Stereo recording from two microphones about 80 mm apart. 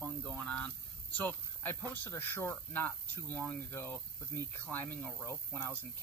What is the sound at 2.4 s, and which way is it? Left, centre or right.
Speech, left.